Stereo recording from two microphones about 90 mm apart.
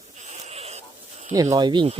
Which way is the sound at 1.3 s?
40° right (ahead or behind).